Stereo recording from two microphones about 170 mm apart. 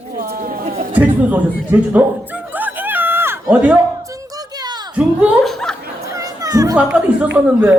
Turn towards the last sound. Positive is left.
turn(degrees=-10)  # may be behind; listen again after turning